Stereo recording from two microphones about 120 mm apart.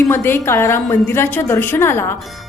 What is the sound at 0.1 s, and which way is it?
A woman's voice, 20° left (ahead or behind).